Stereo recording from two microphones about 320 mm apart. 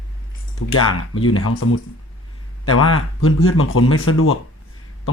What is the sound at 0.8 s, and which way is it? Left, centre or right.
Speech, left.